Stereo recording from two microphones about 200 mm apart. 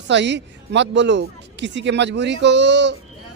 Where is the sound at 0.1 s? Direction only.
60° right (ahead or behind).